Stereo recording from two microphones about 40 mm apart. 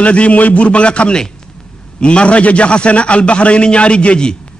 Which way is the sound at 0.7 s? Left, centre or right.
Left.